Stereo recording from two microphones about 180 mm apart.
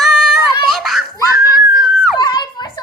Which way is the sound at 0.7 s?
Centre (ahead or behind).